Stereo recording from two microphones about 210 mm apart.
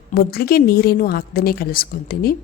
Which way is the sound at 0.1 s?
45° left (ahead or behind).